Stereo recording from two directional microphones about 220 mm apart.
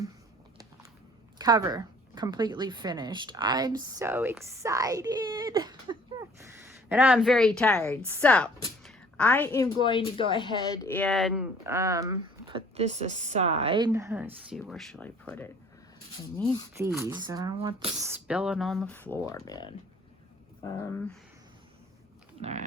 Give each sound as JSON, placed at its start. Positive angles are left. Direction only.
{"t": 1.4, "sound": "a woman's voice", "side_deg": -15}
{"t": 8.8, "sound": "a sound", "side_deg": 5}
{"t": 9.8, "sound": "speech", "side_deg": 20}
{"t": 11.6, "sound": "speech", "side_deg": -15}
{"t": 17.0, "sound": "speech", "side_deg": -15}
{"t": 22.4, "sound": "speech", "side_deg": -30}